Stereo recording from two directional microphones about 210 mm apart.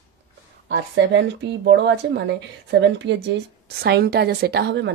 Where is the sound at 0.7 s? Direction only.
55° right (ahead or behind).